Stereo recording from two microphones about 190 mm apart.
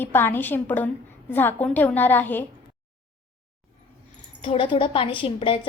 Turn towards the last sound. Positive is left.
turn(degrees=30)  # may be behind; listen again after turning